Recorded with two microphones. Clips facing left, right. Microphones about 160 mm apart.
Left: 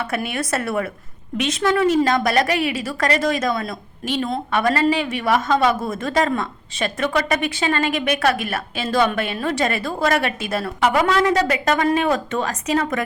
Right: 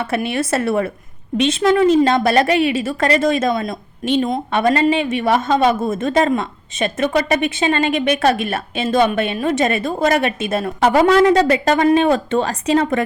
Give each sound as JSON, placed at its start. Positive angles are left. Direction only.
{"t": 0.0, "sound": "a woman's voice", "side_deg": -25}